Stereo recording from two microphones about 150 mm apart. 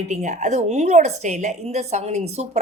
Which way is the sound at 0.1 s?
50° right (ahead or behind).